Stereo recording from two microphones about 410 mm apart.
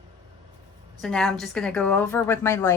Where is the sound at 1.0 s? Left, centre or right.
Centre.